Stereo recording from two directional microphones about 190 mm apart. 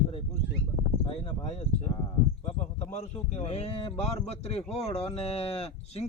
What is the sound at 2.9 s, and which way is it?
Speech, 35° left (ahead or behind).